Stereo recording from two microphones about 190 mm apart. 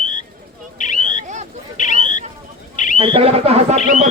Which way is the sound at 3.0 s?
30° right (ahead or behind).